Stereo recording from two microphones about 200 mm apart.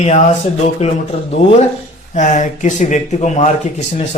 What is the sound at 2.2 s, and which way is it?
Speech, 35° left (ahead or behind).